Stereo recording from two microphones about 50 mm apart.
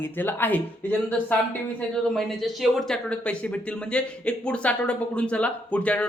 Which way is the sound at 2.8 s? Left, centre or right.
Centre.